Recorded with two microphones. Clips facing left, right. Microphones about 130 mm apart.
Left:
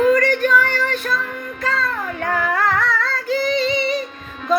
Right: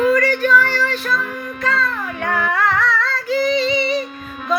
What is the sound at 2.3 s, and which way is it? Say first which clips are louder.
Female singing: right 1 dB; 40° left (ahead or behind).